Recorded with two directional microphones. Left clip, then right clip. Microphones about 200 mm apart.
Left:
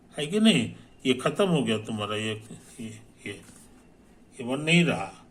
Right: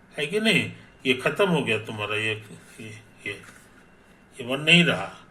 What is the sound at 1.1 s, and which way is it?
Speech, 25° left (ahead or behind).